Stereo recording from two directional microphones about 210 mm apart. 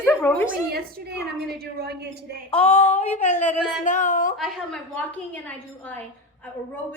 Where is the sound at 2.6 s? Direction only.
30° left (ahead or behind).